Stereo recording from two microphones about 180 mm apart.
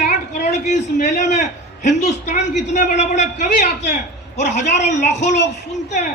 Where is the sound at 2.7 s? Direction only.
45° left (ahead or behind).